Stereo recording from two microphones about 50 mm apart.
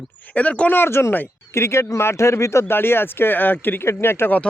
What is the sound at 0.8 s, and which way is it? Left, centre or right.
Speech, left.